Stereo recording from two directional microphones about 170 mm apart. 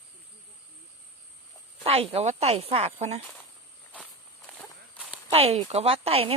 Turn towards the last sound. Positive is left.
turn(degrees=-35)  # may be behind; listen again after turning